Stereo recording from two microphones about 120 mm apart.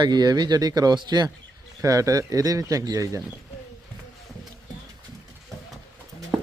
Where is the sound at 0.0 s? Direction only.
35° right (ahead or behind).